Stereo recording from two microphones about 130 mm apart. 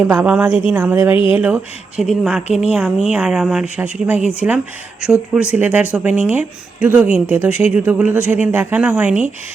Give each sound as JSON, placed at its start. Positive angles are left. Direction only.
{"t": 0.0, "sound": "speech", "side_deg": -10}